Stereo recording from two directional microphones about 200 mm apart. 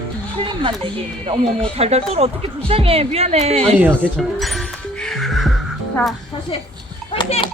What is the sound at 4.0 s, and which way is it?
Music, centre (ahead or behind).